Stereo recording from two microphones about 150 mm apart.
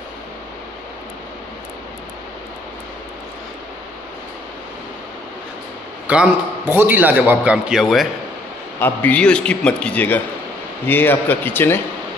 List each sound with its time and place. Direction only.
6.0 s a man's voice: 10° right (ahead or behind)
8.7 s a man's voice: 15° left (ahead or behind)